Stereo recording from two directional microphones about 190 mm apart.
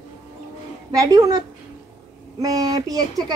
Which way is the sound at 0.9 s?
20° right (ahead or behind).